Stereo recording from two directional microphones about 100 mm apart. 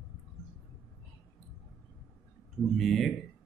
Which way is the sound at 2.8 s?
Centre (ahead or behind).